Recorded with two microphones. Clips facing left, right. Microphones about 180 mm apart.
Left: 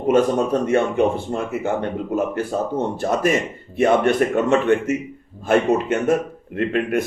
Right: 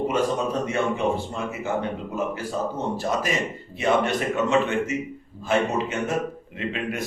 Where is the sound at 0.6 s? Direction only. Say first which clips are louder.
Left 6 dB; 55° left (ahead or behind).